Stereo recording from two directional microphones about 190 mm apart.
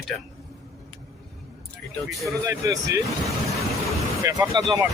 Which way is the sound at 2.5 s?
15° right (ahead or behind).